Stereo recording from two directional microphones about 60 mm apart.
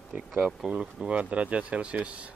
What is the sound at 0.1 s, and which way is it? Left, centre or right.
Speech, right.